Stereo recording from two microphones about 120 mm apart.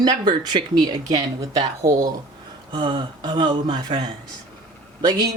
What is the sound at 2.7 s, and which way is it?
A woman's voice, 45° right (ahead or behind).